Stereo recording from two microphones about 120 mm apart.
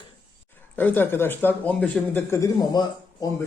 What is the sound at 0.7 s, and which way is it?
Speech, 15° left (ahead or behind).